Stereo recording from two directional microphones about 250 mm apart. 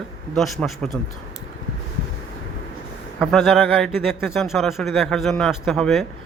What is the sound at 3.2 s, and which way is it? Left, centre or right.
Speech, centre.